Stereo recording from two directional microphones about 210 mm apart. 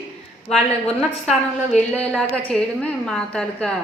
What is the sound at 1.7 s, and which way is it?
Speech, 35° left (ahead or behind).